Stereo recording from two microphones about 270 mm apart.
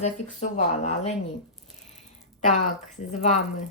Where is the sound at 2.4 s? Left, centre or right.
Left.